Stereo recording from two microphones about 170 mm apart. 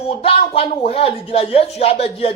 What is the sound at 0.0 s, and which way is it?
Music, 35° left (ahead or behind).